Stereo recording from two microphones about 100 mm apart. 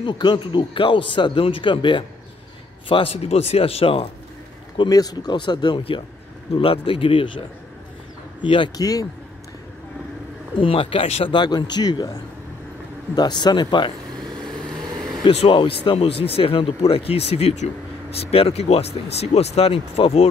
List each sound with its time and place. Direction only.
0.0 s speech: 50° left (ahead or behind)
2.9 s speech: 80° left
4.8 s speech: 40° left (ahead or behind); by 6.0 s 55° left (ahead or behind)
6.5 s speech: 65° left (ahead or behind)
8.7 s speech: 40° left (ahead or behind)
10.6 s speech: 65° left (ahead or behind); by 11.2 s 80° left
11.2 s speech: 50° left (ahead or behind)
14.2 s vehicle: 5° left (ahead or behind)
15.0 s a sound: centre (ahead or behind)
15.2 s speech: 60° left (ahead or behind)